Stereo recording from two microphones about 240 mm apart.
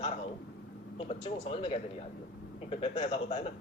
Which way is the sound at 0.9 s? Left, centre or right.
Left.